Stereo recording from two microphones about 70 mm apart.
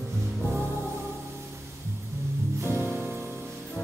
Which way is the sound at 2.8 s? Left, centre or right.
Right.